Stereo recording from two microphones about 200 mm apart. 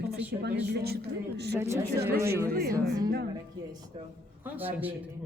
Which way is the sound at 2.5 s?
50° right (ahead or behind).